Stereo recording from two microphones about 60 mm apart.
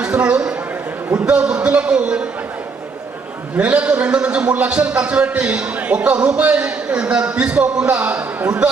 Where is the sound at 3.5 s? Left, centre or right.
Right.